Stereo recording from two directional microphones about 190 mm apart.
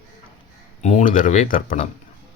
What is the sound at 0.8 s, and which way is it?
Speech, 40° left (ahead or behind).